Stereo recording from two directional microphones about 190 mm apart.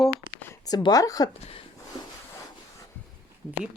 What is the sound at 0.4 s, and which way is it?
Speech, 20° left (ahead or behind).